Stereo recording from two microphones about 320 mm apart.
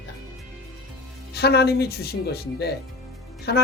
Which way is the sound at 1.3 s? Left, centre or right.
Left.